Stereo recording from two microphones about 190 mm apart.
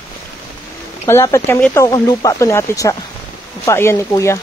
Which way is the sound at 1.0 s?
15° left (ahead or behind).